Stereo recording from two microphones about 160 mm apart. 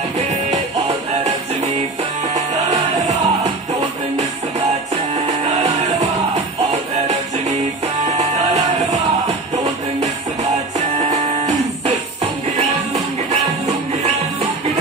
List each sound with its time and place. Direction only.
0.5 s music: 45° right (ahead or behind)
8.2 s music: 45° right (ahead or behind)
9.9 s music: 45° right (ahead or behind)